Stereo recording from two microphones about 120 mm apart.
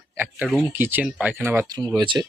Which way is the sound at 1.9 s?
40° right (ahead or behind).